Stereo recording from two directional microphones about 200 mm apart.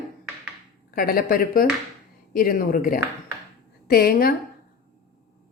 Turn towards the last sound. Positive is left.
turn(degrees=45)  # may be behind; listen again after turning